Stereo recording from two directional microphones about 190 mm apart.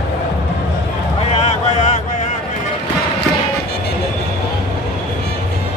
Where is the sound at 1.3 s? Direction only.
35° left (ahead or behind).